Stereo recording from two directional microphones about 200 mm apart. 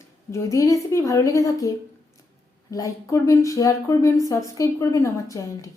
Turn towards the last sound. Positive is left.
turn(degrees=15)  # may be behind; listen again after turning